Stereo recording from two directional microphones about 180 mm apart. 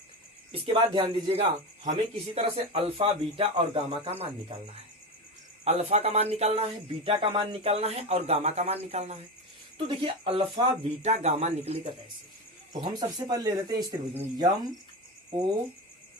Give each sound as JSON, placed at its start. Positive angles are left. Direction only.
{"t": 0.5, "sound": "speech", "side_deg": -30}
{"t": 12.8, "sound": "speech", "side_deg": -20}